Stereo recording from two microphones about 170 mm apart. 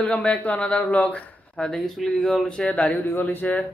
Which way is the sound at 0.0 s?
5° left (ahead or behind).